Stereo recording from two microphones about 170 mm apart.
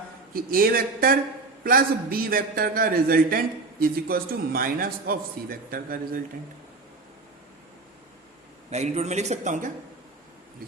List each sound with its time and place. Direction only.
0.3 s a man's voice: 60° right (ahead or behind)
8.7 s a man's voice: 40° right (ahead or behind)